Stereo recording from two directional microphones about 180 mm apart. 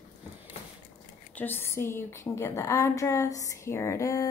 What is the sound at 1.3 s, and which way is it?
Speech, 10° left (ahead or behind).